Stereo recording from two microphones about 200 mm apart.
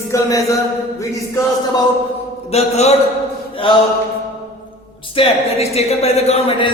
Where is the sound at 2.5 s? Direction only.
30° left (ahead or behind).